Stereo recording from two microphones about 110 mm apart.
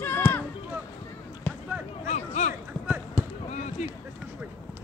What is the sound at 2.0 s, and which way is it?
Speech, 90° left.